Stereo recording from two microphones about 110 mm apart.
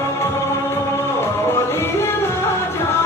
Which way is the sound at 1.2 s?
25° left (ahead or behind).